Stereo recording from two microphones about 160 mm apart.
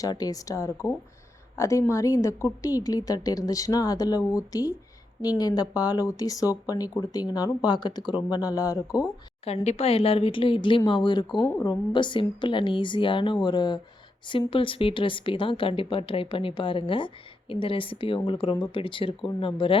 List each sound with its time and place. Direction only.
0.0 s speech: 25° left (ahead or behind)
9.4 s a woman's voice: 40° left (ahead or behind)
11.3 s a woman's voice: 10° left (ahead or behind)
11.6 s a woman's voice: 30° left (ahead or behind)